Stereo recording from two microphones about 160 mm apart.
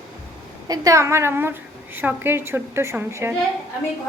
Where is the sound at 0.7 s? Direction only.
20° right (ahead or behind).